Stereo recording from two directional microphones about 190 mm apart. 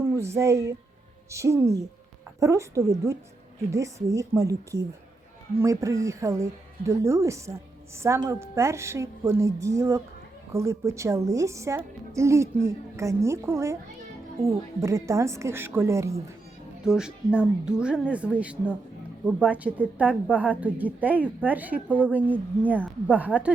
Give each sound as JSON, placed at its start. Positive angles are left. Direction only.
{"t": 0.0, "sound": "a woman's voice", "side_deg": -15}
{"t": 14.8, "sound": "a woman's voice", "side_deg": -15}
{"t": 16.8, "sound": "a woman's voice", "side_deg": -5}